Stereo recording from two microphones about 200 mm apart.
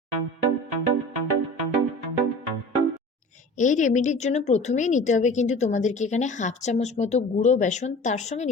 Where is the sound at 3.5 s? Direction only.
40° left (ahead or behind).